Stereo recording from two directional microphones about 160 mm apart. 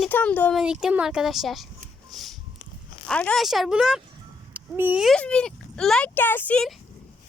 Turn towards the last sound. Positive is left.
turn(degrees=5)  # may be behind; listen again after turning